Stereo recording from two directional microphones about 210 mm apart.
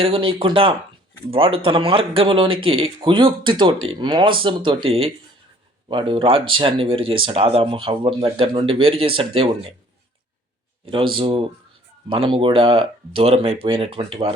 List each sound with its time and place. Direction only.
0.0 s speech: 25° right (ahead or behind)
10.8 s speech: 25° right (ahead or behind)